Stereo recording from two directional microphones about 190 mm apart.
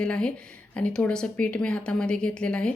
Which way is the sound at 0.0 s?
5° left (ahead or behind).